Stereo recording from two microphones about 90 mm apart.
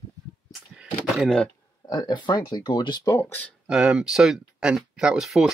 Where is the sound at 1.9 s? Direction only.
50° left (ahead or behind).